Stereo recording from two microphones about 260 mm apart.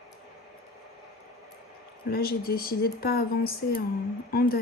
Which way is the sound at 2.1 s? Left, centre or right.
Left.